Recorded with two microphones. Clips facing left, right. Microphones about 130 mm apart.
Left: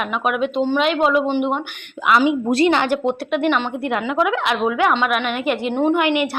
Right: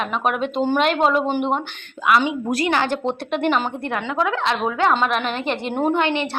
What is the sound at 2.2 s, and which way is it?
Speech, 25° left (ahead or behind).